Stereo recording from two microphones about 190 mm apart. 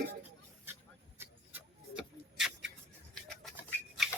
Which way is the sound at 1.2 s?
5° right (ahead or behind).